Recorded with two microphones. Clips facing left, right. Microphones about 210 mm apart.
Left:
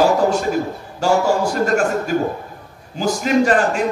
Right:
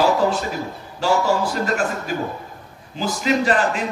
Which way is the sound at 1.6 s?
45° left (ahead or behind).